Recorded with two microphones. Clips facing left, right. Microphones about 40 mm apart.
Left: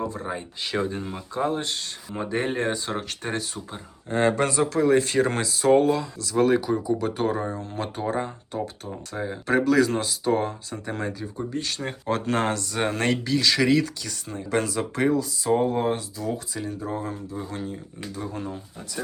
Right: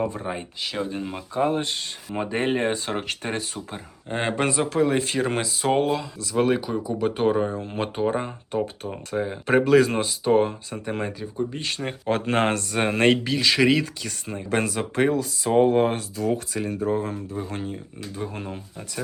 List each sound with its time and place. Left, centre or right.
0.0 s speech: right
0.6 s speech: centre
1.0 s speech: right
4.1 s speech: right
4.9 s speech: centre
7.0 s speech: right
9.5 s speech: right
17.5 s speech: right